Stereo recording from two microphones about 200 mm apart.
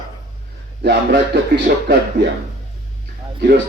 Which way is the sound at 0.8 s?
55° right (ahead or behind).